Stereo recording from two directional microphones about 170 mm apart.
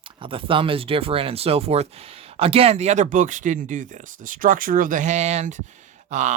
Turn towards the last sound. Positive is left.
turn(degrees=-45)  # may be behind; listen again after turning